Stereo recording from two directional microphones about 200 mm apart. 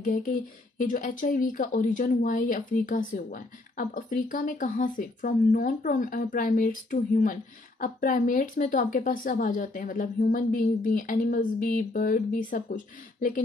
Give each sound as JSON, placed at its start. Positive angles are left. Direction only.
{"t": 0.0, "sound": "speech", "side_deg": 40}